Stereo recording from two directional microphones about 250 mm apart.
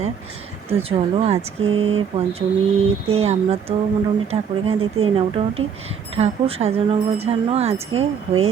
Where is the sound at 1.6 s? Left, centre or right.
Right.